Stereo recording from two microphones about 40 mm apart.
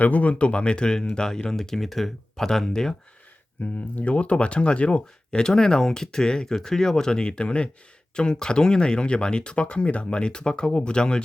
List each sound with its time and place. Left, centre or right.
0.0 s speech: left; by 2.6 s centre
3.6 s speech: left
5.5 s speech: centre